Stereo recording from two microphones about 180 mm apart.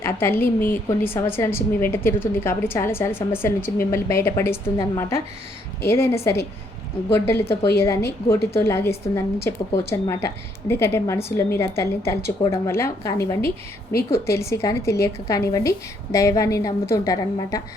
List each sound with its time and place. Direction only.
0.0 s a woman's voice: 15° left (ahead or behind)